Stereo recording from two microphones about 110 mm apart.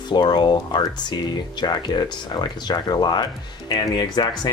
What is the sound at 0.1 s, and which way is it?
Speech, 40° left (ahead or behind).